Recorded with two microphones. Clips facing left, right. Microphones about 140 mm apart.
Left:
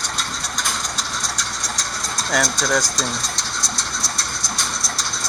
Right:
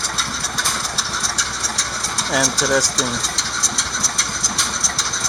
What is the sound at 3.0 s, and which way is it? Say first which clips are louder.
Bird: right 2 dB; 30° right (ahead or behind).